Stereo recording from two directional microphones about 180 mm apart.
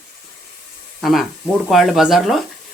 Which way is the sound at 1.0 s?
Centre (ahead or behind).